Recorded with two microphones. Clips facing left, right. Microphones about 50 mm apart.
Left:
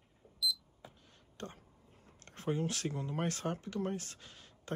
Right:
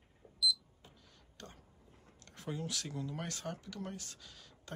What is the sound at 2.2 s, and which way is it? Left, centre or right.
Speech, left.